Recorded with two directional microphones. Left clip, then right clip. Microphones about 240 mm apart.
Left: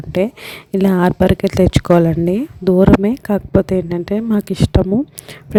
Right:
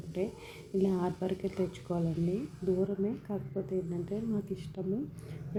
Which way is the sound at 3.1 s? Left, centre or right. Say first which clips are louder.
Left 19 dB; left.